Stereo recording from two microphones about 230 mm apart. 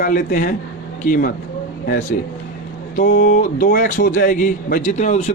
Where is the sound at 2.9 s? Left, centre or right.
Left.